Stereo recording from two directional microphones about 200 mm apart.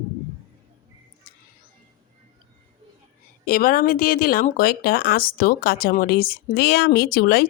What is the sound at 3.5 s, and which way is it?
Speech, 45° left (ahead or behind).